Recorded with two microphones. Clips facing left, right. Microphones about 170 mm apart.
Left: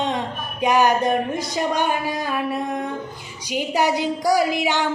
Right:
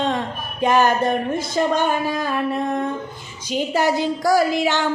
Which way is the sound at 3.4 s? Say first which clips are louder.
Right 1 dB; 15° left (ahead or behind).